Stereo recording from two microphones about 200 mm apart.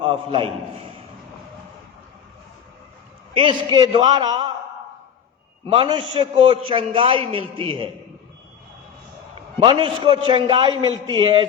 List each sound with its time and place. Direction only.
0.0 s a man's voice: 25° right (ahead or behind)
3.3 s a man's voice: 25° right (ahead or behind)
5.6 s a man's voice: 25° right (ahead or behind)
9.6 s a man's voice: 25° right (ahead or behind)